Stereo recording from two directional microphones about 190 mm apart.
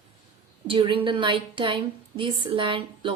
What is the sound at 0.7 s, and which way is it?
A woman's voice, 25° right (ahead or behind).